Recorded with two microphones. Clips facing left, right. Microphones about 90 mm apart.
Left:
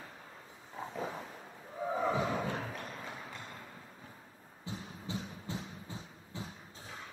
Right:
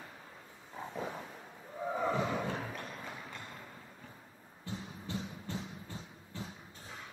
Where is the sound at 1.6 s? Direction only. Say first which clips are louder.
Left 1 dB; 5° left (ahead or behind).